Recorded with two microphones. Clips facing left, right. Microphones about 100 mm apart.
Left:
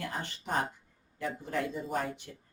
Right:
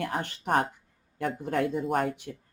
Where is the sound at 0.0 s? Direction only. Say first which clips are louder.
Right 6 dB; 60° right (ahead or behind).